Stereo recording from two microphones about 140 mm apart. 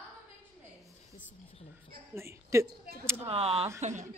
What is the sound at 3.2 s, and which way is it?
Speech, 45° right (ahead or behind).